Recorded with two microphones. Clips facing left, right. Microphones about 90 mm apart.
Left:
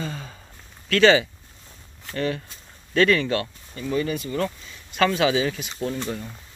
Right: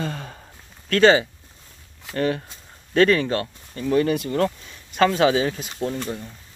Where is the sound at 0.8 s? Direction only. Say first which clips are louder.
Right 1 dB; 40° right (ahead or behind).